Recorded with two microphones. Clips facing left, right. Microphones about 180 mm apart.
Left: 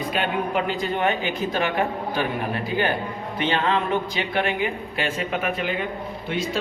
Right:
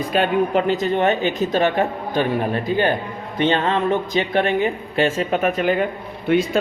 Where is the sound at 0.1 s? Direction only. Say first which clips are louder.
Right 8 dB; 40° right (ahead or behind).